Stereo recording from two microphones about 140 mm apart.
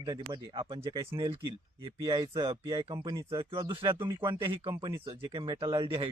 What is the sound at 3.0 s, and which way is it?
Speech, 30° right (ahead or behind).